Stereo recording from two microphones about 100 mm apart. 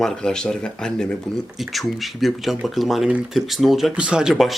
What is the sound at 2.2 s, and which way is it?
Speech, centre (ahead or behind).